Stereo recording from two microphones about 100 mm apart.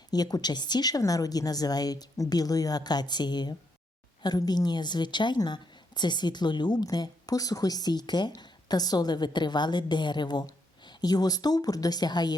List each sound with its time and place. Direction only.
0.1 s a woman's voice: 40° left (ahead or behind)